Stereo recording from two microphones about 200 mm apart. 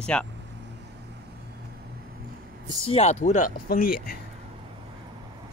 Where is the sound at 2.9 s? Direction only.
30° left (ahead or behind).